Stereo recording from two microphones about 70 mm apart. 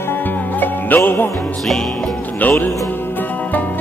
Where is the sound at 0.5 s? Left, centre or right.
Left.